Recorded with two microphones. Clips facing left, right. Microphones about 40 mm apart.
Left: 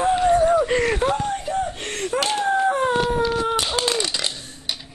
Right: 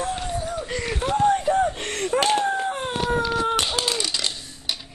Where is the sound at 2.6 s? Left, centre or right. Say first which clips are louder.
Left 7 dB; left.